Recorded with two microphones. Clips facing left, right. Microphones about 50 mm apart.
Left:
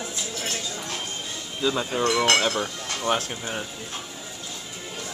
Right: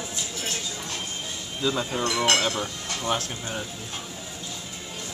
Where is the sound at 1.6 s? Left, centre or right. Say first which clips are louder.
Left 2 dB; centre.